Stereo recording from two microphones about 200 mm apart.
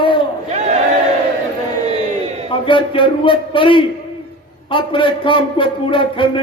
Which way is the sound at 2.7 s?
25° left (ahead or behind).